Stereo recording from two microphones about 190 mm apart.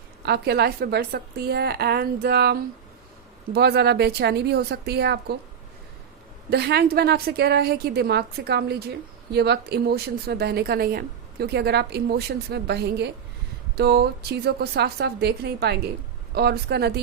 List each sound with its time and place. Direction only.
0.2 s a woman's voice: 60° right (ahead or behind)
6.5 s a woman's voice: 55° right (ahead or behind)